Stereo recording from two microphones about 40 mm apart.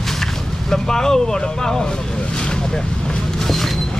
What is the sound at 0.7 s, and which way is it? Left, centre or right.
Speech, centre.